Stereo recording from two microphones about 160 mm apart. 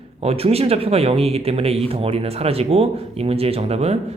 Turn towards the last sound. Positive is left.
turn(degrees=-40)  # may be behind; listen again after turning